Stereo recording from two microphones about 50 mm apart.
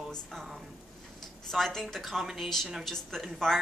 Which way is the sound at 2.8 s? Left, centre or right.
Centre.